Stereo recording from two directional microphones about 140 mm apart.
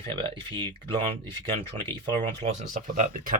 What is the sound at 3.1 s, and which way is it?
Speech, 80° right.